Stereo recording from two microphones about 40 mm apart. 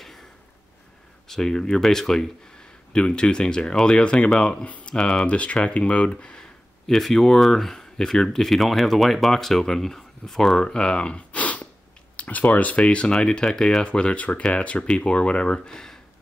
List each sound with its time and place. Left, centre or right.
1.2 s speech: centre
3.2 s speech: left
4.6 s a sound: left
4.9 s speech: left
5.2 s speech: left
6.9 s speech: centre
10.6 s speech: left
11.3 s snort: left
12.2 s a sound: left
12.4 s speech: left
13.5 s speech: centre
13.8 s speech: left